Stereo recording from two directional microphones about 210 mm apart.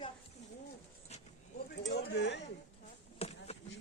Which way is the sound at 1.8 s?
50° left (ahead or behind).